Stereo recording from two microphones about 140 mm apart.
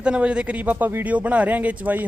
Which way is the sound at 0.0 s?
5° right (ahead or behind).